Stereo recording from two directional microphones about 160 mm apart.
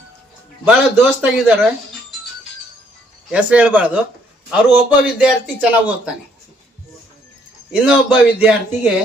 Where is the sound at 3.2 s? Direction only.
5° right (ahead or behind).